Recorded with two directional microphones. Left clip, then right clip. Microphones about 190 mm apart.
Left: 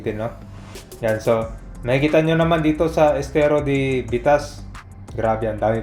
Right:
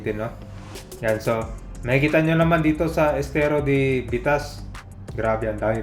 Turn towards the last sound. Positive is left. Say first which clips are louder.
# left 3 dB
turn(degrees=15)  # may be behind; listen again after turning